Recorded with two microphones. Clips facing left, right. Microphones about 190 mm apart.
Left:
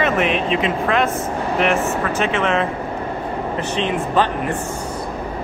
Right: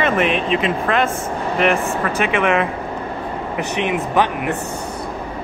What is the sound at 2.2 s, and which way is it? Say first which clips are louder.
Speech: right 2 dB; 15° right (ahead or behind).